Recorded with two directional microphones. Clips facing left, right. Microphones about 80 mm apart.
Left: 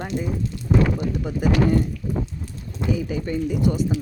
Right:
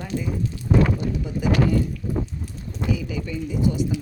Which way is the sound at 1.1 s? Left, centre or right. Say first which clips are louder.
Left 1 dB; left.